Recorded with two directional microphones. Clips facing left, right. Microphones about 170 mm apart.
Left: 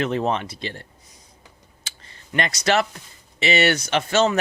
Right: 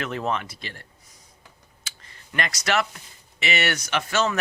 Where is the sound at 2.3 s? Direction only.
25° left (ahead or behind).